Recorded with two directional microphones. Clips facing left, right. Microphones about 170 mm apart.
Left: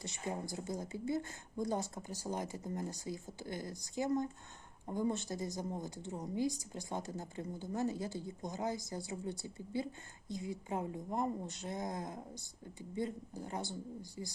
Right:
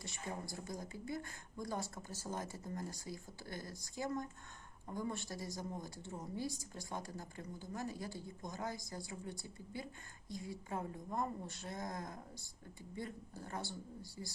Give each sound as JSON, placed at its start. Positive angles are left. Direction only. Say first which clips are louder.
{"t": 0.0, "sound": "speech", "louder": "left 5 dB", "side_deg": 20}